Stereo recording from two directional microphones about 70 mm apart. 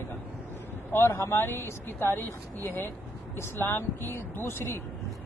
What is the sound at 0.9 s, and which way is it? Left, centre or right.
Speech, left.